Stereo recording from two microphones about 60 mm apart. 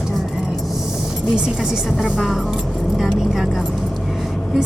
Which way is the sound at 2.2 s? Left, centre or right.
Centre.